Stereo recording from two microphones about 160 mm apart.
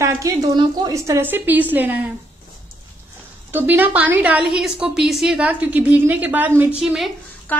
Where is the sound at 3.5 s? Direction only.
10° right (ahead or behind).